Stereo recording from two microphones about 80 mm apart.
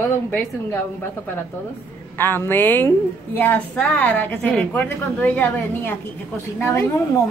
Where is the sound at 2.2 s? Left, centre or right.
Left.